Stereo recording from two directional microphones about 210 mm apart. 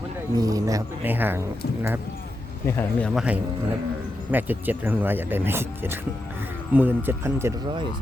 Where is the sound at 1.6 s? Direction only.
50° left (ahead or behind).